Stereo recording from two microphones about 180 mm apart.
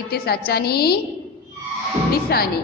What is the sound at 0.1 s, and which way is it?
Speech, 60° left (ahead or behind).